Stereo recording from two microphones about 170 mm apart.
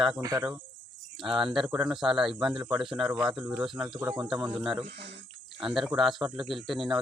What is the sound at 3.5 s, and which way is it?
Speech, 25° right (ahead or behind).